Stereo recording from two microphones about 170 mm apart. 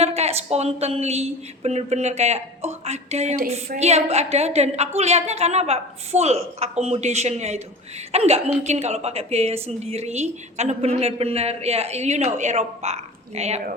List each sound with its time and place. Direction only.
0.0 s a woman's voice: 35° right (ahead or behind)